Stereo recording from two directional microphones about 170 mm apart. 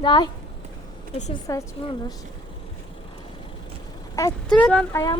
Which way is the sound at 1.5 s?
20° left (ahead or behind).